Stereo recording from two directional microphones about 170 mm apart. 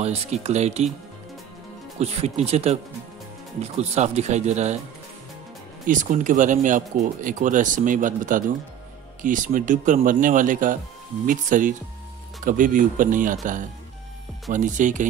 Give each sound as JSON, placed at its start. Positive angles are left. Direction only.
{"t": 0.0, "sound": "speech", "side_deg": -40}
{"t": 2.0, "sound": "speech", "side_deg": -40}
{"t": 5.9, "sound": "speech", "side_deg": -50}